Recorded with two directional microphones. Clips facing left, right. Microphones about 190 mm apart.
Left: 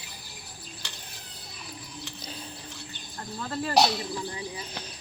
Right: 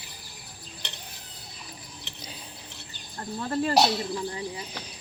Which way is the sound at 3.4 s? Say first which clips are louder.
Right 5 dB; 25° right (ahead or behind).